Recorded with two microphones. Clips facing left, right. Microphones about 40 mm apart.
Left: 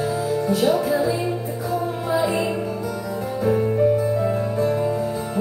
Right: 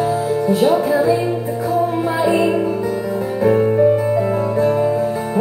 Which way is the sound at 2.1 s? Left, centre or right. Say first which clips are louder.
Right 4 dB; right.